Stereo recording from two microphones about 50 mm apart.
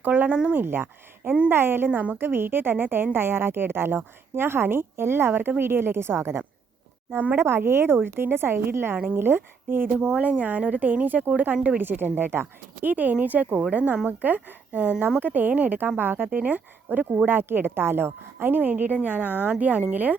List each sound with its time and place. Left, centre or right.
0.0 s a woman's voice: right
2.1 s a woman's voice: right
9.9 s a woman's voice: centre
10.2 s speech: right
11.5 s a woman's voice: right
11.8 s a woman's voice: right